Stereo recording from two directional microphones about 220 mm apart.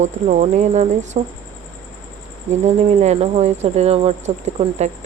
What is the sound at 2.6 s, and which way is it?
Speech, 30° right (ahead or behind).